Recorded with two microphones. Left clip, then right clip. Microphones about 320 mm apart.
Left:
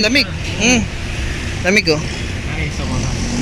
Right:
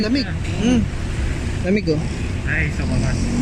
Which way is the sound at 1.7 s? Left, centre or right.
Left.